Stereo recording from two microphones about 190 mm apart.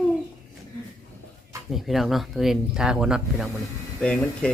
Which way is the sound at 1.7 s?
Centre (ahead or behind).